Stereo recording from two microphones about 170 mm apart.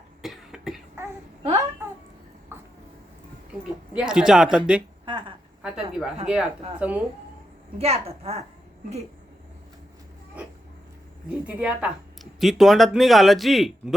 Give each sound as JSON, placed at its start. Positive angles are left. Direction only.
{"t": 0.2, "sound": "cough", "side_deg": 0}
{"t": 2.5, "sound": "a sound", "side_deg": -15}
{"t": 3.9, "sound": "speech", "side_deg": -5}
{"t": 5.0, "sound": "a sound", "side_deg": -30}
{"t": 5.6, "sound": "speech", "side_deg": -5}
{"t": 7.8, "sound": "a woman's voice", "side_deg": -35}
{"t": 11.3, "sound": "speech", "side_deg": -5}